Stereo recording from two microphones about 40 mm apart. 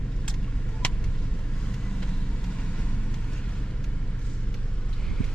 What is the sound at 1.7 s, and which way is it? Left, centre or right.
Vehicle, left.